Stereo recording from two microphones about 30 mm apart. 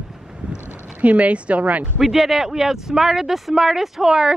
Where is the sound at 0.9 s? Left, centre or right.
Right.